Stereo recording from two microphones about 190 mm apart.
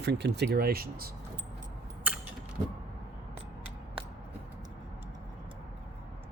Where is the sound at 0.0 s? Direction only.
60° right (ahead or behind).